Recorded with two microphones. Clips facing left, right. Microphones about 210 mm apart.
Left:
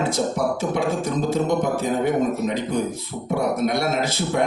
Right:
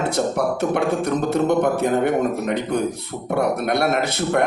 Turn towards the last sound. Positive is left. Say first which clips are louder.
# right 2 dB
turn(degrees=-60)  # may be behind; listen again after turning